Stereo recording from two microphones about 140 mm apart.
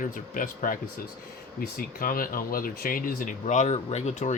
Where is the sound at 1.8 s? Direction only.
90° left; by 4.3 s 55° left (ahead or behind).